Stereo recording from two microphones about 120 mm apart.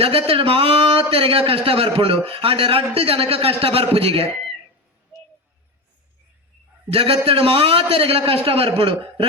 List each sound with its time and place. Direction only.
0.0 s speech: 50° right (ahead or behind)
6.9 s speech: 50° right (ahead or behind)